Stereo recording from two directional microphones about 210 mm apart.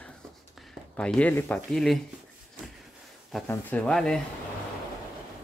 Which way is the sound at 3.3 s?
5° left (ahead or behind).